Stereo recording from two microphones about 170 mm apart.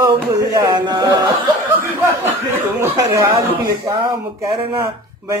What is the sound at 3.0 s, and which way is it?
Speech, 20° right (ahead or behind).